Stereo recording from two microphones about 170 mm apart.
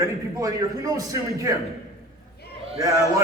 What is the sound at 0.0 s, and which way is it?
A man's voice, 20° right (ahead or behind).